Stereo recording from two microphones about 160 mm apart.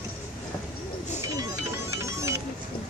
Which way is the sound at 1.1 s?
20° right (ahead or behind).